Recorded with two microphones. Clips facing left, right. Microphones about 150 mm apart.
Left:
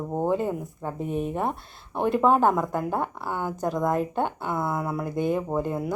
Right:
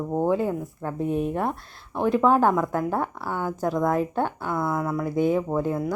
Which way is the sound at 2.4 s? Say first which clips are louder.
Right 1 dB; 10° left (ahead or behind).